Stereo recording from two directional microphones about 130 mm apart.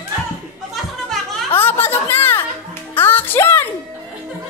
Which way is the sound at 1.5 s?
15° left (ahead or behind).